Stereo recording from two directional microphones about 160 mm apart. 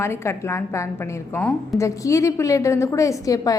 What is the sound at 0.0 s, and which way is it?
A woman's voice, 15° left (ahead or behind).